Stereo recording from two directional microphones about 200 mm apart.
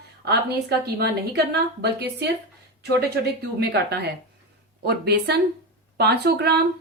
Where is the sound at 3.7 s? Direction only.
55° right (ahead or behind).